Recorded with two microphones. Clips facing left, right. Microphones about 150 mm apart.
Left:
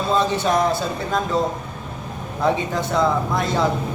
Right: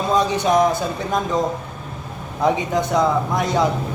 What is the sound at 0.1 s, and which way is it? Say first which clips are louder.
A man's voice: right 2 dB; 15° right (ahead or behind).